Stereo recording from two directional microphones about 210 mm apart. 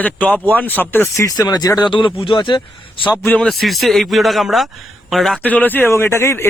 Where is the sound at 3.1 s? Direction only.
5° left (ahead or behind).